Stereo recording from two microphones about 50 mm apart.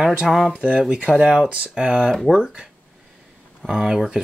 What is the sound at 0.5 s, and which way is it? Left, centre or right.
Speech, right.